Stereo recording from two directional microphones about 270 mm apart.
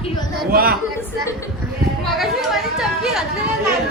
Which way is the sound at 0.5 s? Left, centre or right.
Right.